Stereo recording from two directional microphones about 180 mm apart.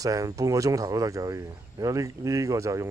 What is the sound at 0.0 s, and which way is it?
Speech, 20° right (ahead or behind).